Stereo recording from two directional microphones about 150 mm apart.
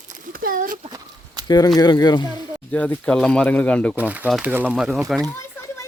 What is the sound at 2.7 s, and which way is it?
Speech, 10° left (ahead or behind).